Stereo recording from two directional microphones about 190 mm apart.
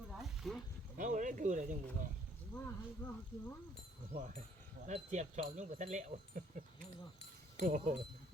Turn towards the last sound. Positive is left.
turn(degrees=-45)  # may be behind; listen again after turning